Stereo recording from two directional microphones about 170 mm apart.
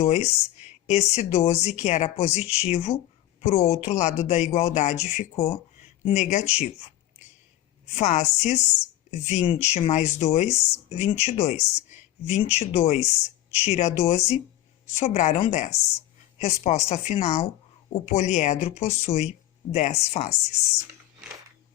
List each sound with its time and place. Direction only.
0.0 s speech: 40° left (ahead or behind)
7.9 s speech: 40° left (ahead or behind)